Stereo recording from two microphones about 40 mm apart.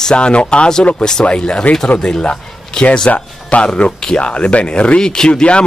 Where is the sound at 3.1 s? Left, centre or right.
Left.